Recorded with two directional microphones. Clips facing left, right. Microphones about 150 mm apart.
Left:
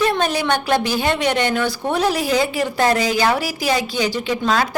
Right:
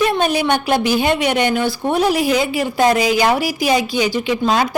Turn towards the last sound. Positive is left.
turn(degrees=-15)  # may be behind; listen again after turning